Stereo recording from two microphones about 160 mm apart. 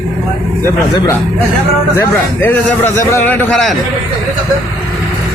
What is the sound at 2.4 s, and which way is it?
A man's voice, 15° left (ahead or behind).